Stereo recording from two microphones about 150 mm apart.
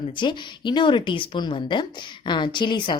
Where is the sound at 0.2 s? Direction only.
30° left (ahead or behind).